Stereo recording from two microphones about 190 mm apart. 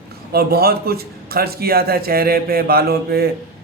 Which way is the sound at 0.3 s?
55° right (ahead or behind).